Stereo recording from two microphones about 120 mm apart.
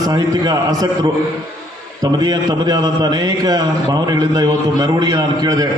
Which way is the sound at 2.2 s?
35° right (ahead or behind).